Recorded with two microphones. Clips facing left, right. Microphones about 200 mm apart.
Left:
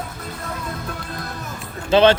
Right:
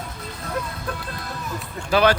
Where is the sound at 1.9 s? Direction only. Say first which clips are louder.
Left 4 dB; 25° left (ahead or behind).